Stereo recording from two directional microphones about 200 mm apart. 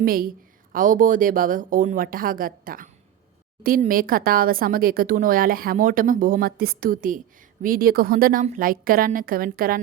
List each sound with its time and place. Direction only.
0.0 s speech: 45° right (ahead or behind)